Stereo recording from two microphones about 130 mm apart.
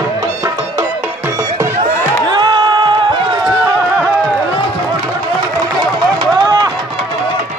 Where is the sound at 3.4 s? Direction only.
30° right (ahead or behind).